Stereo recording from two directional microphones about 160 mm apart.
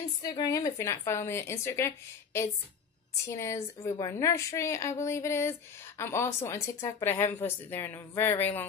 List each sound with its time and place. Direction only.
0.2 s a woman's voice: 20° left (ahead or behind)
3.3 s a woman's voice: 15° left (ahead or behind)